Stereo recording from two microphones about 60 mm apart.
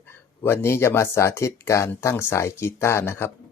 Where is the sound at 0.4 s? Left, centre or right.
Left.